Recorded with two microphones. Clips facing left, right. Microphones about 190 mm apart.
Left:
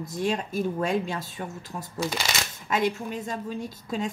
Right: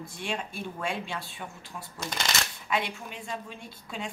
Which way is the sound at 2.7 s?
40° left (ahead or behind).